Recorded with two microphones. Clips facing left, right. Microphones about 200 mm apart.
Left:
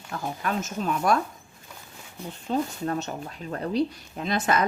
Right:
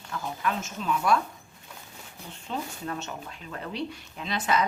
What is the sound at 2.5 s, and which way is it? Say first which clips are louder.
Speech: left 7 dB; 40° left (ahead or behind).